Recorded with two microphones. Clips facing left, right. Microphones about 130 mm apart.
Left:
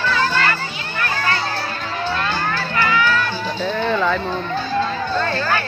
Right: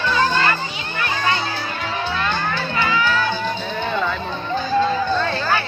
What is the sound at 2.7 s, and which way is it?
Music, 20° right (ahead or behind).